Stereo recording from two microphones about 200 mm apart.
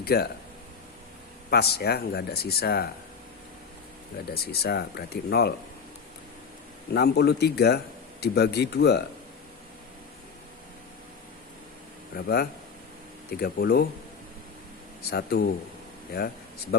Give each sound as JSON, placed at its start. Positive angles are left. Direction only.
{"t": 0.0, "sound": "speech", "side_deg": 50}
{"t": 1.5, "sound": "speech", "side_deg": 50}
{"t": 4.3, "sound": "speech", "side_deg": 50}
{"t": 6.9, "sound": "speech", "side_deg": 55}
{"t": 12.1, "sound": "speech", "side_deg": 50}
{"t": 15.1, "sound": "speech", "side_deg": 50}